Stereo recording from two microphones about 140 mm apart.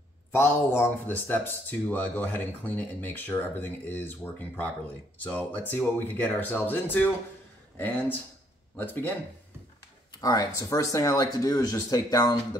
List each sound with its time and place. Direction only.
0.3 s speech: 15° left (ahead or behind)
8.7 s speech: 15° left (ahead or behind)
10.2 s speech: 25° left (ahead or behind)